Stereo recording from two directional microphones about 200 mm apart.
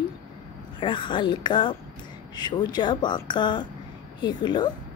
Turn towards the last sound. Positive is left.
turn(degrees=20)  # may be behind; listen again after turning